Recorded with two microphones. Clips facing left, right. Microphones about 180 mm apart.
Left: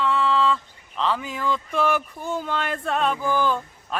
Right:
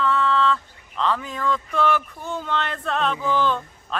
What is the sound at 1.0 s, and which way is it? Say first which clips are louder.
Speech: right 1 dB; 5° left (ahead or behind).